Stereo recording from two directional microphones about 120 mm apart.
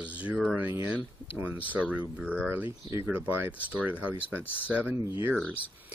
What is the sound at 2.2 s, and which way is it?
Speech, 10° left (ahead or behind).